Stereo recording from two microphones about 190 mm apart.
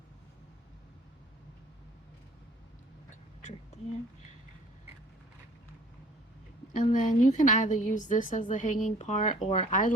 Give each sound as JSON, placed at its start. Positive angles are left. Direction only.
{"t": 6.7, "sound": "a woman's voice", "side_deg": 45}